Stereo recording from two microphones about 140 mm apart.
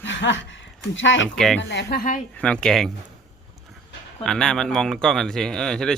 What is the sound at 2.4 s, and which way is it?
Speech, 5° left (ahead or behind).